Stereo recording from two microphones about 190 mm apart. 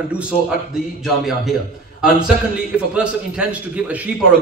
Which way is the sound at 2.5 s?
5° right (ahead or behind).